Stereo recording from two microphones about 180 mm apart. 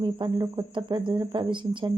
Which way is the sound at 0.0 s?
25° right (ahead or behind).